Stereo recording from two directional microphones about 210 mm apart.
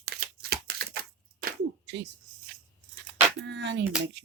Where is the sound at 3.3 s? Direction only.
55° right (ahead or behind).